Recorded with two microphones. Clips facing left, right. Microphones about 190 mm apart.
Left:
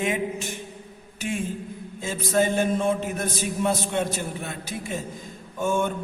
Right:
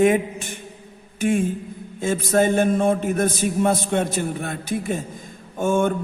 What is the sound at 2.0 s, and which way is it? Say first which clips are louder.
A man's voice: right 4 dB; 50° right (ahead or behind).